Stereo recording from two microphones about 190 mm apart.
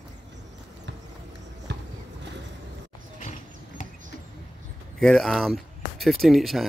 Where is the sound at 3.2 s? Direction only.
45° left (ahead or behind).